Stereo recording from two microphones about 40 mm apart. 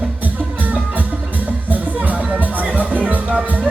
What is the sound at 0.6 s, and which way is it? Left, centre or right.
Music, right.